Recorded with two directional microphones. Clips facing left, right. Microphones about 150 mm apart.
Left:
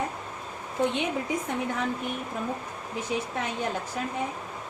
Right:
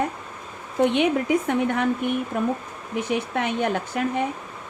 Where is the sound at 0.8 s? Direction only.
75° right (ahead or behind).